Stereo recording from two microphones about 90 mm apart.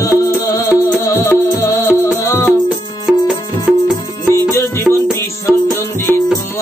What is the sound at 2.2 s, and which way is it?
Music, 25° left (ahead or behind).